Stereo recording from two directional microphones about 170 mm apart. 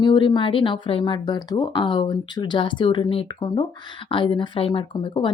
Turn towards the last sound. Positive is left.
turn(degrees=30)  # may be behind; listen again after turning